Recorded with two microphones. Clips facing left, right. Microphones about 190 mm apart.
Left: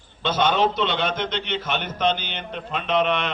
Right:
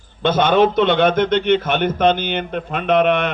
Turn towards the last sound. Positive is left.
turn(degrees=-55)  # may be behind; listen again after turning